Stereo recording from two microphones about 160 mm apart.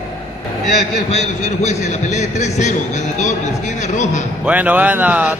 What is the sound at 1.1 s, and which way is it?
A man's voice, 45° left (ahead or behind).